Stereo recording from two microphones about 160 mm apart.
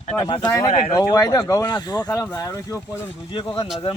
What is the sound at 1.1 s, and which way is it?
Speech, 20° left (ahead or behind).